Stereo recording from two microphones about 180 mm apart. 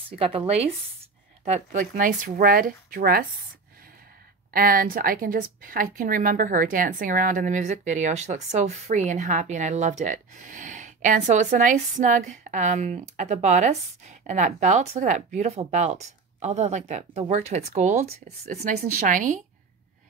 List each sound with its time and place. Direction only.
0.1 s a woman's voice: 30° right (ahead or behind); by 3.3 s 55° right (ahead or behind)
4.5 s a woman's voice: 55° right (ahead or behind)